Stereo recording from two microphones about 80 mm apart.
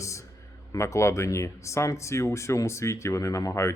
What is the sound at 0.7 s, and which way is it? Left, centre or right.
Speech, left.